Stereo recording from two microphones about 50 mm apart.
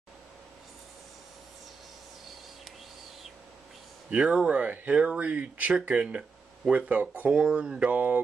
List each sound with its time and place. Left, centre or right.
4.3 s speech: right
6.9 s speech: right
7.2 s speech: centre
7.9 s speech: right